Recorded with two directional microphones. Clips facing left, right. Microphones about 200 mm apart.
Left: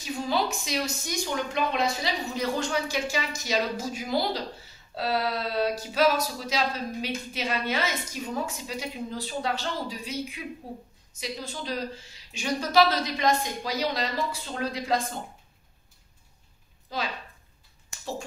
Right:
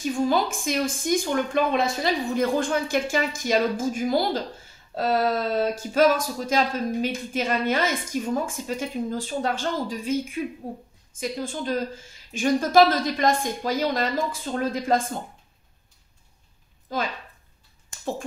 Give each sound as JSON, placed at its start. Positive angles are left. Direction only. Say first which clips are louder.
{"t": 0.0, "sound": "speech", "louder": "right 5 dB", "side_deg": -50}
{"t": 16.9, "sound": "speech", "louder": "right 5 dB", "side_deg": -50}